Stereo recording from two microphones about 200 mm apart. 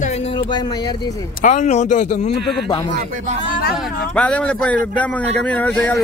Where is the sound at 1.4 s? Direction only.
35° left (ahead or behind).